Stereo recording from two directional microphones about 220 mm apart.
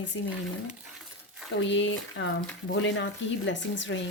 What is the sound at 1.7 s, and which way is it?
Speech, 55° left (ahead or behind).